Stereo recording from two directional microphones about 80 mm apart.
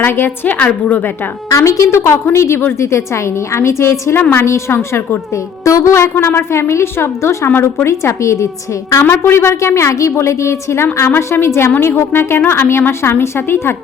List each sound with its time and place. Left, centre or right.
0.0 s a woman's voice: left
1.5 s a woman's voice: left
9.0 s a woman's voice: left